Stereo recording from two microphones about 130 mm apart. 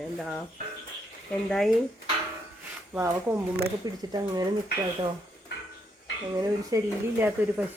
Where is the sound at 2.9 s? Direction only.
15° right (ahead or behind).